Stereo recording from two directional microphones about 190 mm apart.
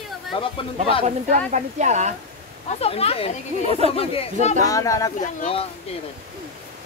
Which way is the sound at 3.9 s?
30° left (ahead or behind).